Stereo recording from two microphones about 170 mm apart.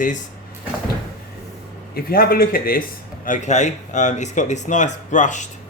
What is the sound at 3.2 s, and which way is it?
A man's voice, 45° left (ahead or behind).